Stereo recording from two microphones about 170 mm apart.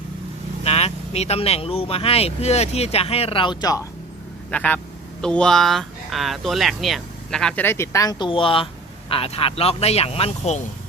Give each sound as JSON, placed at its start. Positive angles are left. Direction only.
{"t": 0.6, "sound": "speech", "side_deg": 35}
{"t": 4.5, "sound": "speech", "side_deg": 10}